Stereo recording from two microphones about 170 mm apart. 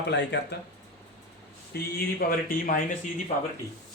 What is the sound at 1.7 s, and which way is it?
Speech, 65° left (ahead or behind).